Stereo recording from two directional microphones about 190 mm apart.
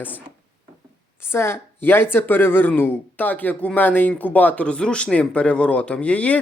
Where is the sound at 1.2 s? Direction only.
10° left (ahead or behind).